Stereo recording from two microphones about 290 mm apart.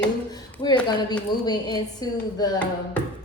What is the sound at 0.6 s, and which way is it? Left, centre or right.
A woman's voice, centre.